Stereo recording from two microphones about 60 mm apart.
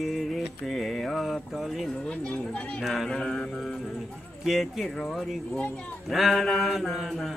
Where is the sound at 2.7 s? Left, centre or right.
Centre.